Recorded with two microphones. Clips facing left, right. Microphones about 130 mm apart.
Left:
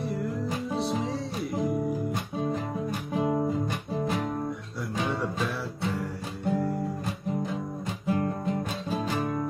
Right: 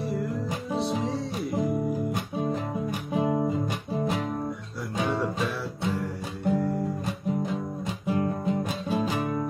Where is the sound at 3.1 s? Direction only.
5° right (ahead or behind).